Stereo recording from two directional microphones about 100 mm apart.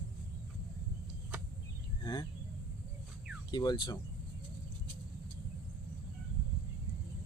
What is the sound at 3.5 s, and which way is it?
Speech, 45° left (ahead or behind).